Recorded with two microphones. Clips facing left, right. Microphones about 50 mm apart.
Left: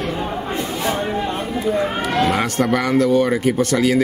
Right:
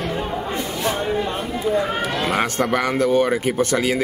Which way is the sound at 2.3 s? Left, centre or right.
Right.